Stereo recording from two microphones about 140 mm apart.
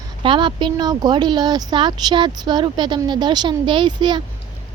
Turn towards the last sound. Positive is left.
turn(degrees=-35)  # may be behind; listen again after turning